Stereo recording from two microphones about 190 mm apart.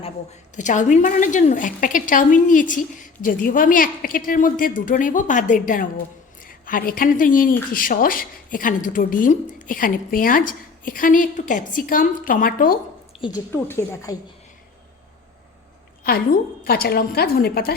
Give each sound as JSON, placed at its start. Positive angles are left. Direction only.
{"t": 0.5, "sound": "speech", "side_deg": 40}
{"t": 13.2, "sound": "a woman's voice", "side_deg": 15}
{"t": 16.0, "sound": "speech", "side_deg": 50}